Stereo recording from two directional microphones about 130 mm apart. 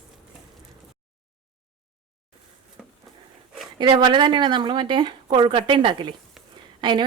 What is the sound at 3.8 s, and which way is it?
Speech, 35° right (ahead or behind).